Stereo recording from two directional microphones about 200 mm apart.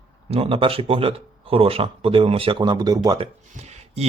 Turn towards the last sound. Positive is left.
turn(degrees=-35)  # may be behind; listen again after turning